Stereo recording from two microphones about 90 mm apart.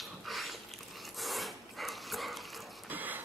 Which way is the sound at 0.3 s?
Centre (ahead or behind).